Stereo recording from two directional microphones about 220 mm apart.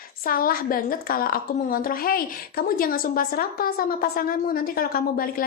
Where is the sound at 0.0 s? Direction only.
40° left (ahead or behind).